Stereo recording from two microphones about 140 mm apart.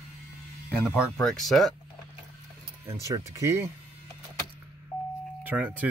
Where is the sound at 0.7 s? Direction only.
10° right (ahead or behind).